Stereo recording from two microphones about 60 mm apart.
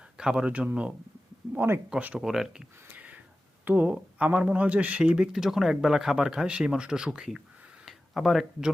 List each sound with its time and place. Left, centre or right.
0.2 s speech: centre
1.5 s speech: right
2.1 s speech: centre
2.9 s a sound: right
3.7 s speech: right; by 8.7 s centre